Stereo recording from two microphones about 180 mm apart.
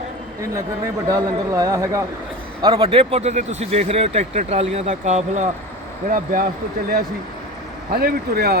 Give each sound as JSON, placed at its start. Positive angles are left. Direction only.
{"t": 1.0, "sound": "a man's voice", "side_deg": -20}
{"t": 6.1, "sound": "speech", "side_deg": -50}
{"t": 7.9, "sound": "speech", "side_deg": -60}